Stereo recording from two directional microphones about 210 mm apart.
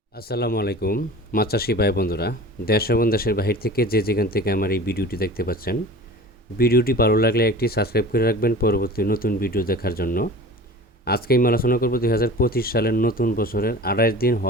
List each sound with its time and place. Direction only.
0.1 s speech: 50° left (ahead or behind)